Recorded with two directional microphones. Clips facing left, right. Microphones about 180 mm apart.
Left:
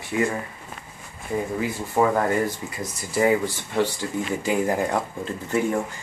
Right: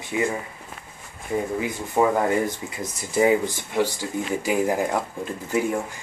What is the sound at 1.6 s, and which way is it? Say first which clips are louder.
Speech: left 1 dB; 15° right (ahead or behind).